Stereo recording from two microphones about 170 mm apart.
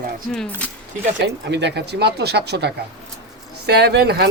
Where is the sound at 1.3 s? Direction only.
90° right.